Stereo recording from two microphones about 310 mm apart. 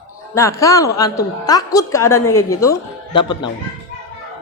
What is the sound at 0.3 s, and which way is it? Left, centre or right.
Speech, centre.